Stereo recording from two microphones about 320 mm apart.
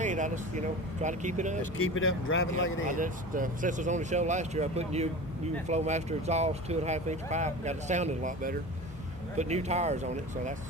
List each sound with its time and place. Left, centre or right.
0.0 s a sound: right
1.0 s speech: right
1.8 s speech: left
2.9 s speech: right